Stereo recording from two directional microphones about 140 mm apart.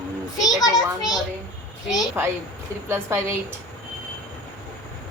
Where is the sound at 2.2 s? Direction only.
15° right (ahead or behind).